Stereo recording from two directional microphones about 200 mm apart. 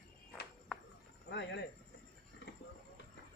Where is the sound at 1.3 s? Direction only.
60° left (ahead or behind).